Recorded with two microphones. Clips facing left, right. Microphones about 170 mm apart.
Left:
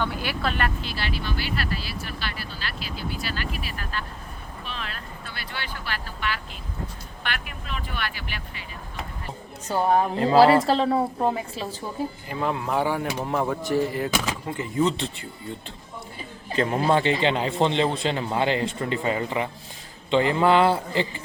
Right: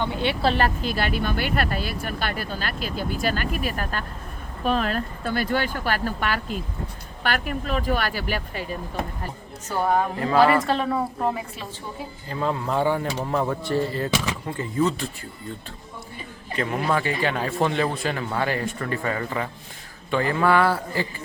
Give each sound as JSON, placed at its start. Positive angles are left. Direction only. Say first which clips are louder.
{"t": 0.0, "sound": "speech", "louder": "right 4 dB", "side_deg": -25}
{"t": 10.2, "sound": "a man's voice", "louder": "left 3 dB", "side_deg": 30}
{"t": 12.3, "sound": "a man's voice", "louder": "right 2 dB", "side_deg": 15}
{"t": 16.6, "sound": "a man's voice", "louder": "left 3 dB", "side_deg": 30}